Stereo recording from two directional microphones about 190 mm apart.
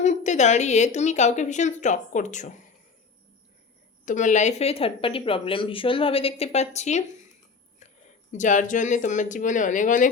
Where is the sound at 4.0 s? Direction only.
40° left (ahead or behind).